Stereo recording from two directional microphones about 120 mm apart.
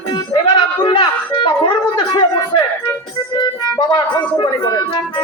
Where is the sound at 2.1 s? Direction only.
35° left (ahead or behind).